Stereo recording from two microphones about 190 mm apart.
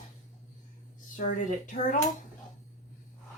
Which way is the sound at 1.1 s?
40° left (ahead or behind).